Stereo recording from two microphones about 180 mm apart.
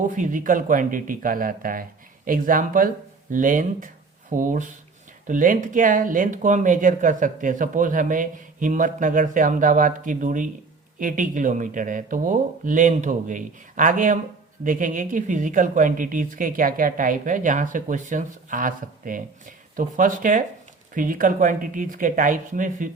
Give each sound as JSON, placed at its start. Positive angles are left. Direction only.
{"t": 0.0, "sound": "speech", "side_deg": -45}